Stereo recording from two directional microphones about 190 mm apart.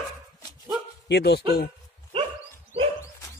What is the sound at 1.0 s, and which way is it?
Speech, 60° left (ahead or behind).